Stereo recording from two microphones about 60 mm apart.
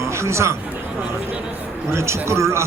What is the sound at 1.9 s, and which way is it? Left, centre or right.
Speech, right.